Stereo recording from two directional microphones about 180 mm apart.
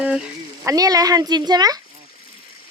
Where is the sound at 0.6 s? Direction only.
20° right (ahead or behind).